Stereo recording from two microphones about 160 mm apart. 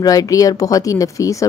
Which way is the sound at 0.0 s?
25° left (ahead or behind).